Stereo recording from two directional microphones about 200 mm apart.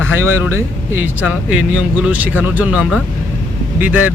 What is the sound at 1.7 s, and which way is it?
Speech, 5° right (ahead or behind).